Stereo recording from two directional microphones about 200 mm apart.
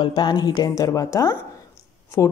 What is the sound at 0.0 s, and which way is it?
Speech, 20° left (ahead or behind).